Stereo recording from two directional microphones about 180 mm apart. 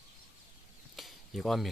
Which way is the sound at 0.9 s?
Centre (ahead or behind).